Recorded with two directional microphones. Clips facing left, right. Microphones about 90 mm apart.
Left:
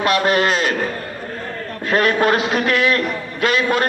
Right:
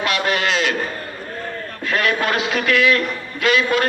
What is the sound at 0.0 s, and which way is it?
Speech, 40° left (ahead or behind).